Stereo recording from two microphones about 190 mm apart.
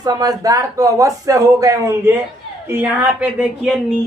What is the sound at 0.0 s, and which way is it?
Speech, 20° right (ahead or behind).